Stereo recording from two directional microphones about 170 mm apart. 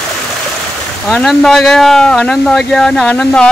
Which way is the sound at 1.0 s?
Centre (ahead or behind).